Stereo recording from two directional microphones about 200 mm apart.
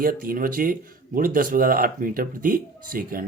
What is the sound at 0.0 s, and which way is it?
Speech, 45° right (ahead or behind).